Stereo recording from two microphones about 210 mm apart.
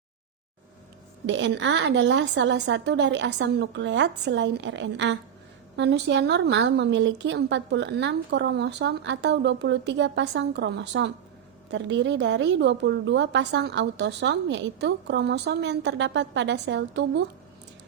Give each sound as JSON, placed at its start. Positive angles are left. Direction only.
{"t": 1.3, "sound": "a woman's voice", "side_deg": -60}